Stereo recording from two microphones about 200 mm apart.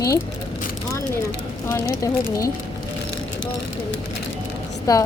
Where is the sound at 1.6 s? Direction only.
15° left (ahead or behind).